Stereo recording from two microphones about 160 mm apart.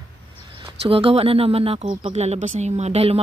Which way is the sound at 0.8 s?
35° right (ahead or behind).